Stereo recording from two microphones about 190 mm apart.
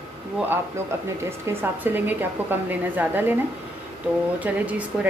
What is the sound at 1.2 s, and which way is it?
Speech, 10° right (ahead or behind).